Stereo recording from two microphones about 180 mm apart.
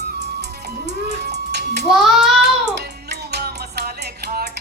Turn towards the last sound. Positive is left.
turn(degrees=-60)  # may be behind; listen again after turning